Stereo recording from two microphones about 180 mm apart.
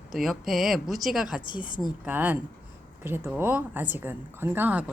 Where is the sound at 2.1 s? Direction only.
10° right (ahead or behind).